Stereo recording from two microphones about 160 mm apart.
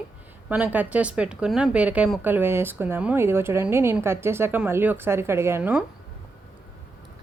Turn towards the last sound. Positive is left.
turn(degrees=-15)  # may be behind; listen again after turning